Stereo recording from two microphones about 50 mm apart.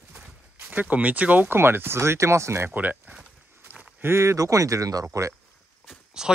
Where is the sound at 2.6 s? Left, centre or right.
Right.